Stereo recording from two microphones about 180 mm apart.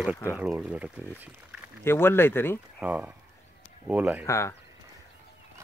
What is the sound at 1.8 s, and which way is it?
Speech, 10° left (ahead or behind).